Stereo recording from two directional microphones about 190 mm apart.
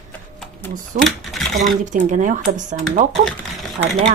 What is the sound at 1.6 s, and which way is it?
Speech, 40° right (ahead or behind).